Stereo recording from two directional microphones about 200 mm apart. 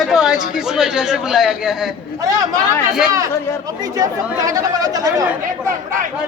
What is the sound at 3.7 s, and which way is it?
Speech, 20° right (ahead or behind).